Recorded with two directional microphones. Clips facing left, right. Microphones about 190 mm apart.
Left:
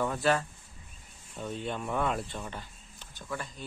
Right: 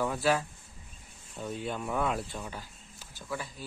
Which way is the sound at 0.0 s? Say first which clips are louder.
Even; 5° right (ahead or behind).